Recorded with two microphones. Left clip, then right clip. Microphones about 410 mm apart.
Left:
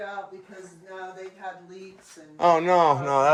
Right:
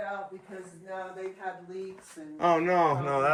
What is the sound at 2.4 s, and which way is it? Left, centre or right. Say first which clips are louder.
Speech: left 5 dB; centre.